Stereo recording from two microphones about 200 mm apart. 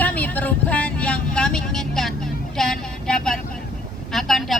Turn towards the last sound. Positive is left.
turn(degrees=0)  # may be behind; listen again after turning